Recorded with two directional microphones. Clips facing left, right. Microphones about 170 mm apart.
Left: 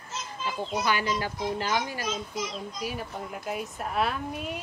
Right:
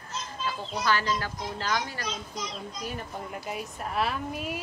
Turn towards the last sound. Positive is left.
turn(degrees=0)  # may be behind; listen again after turning